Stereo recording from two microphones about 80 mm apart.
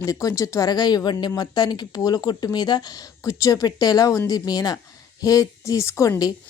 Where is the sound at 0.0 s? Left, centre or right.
Left.